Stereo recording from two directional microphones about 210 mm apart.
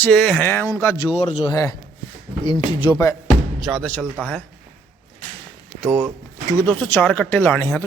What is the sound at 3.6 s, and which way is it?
Speech, centre (ahead or behind).